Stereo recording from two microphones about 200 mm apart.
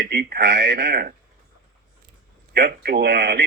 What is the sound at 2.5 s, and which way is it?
Speech, 50° right (ahead or behind).